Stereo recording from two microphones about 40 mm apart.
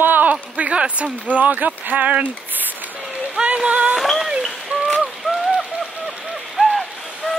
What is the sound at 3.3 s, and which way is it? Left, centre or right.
Speech, right.